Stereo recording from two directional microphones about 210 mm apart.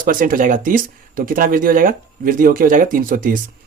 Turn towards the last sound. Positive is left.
turn(degrees=-40)  # may be behind; listen again after turning